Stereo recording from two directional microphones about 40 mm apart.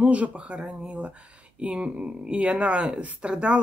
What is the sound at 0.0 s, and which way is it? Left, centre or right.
Speech, right.